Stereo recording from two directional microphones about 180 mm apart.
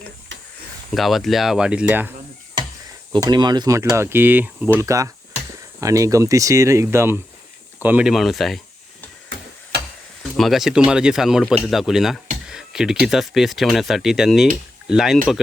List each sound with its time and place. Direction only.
0.9 s speech: centre (ahead or behind)
3.1 s speech: 20° right (ahead or behind); by 9.0 s centre (ahead or behind)
10.3 s speech: centre (ahead or behind)
12.5 s a sound: 5° right (ahead or behind)
13.1 s speech: centre (ahead or behind)